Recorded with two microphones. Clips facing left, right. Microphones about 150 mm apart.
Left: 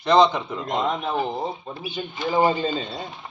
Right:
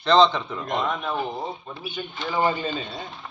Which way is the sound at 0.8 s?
30° left (ahead or behind).